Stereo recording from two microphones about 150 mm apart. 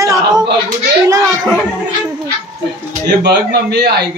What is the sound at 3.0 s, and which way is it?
Speech, 90° right.